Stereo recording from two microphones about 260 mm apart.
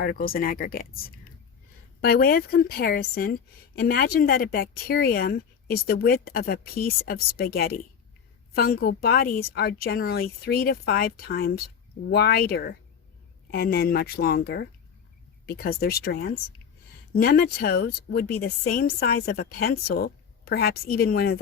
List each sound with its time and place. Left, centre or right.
0.0 s a woman's voice: left
2.0 s a woman's voice: left